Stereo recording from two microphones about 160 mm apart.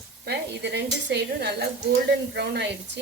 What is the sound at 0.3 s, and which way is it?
Speech, 90° right.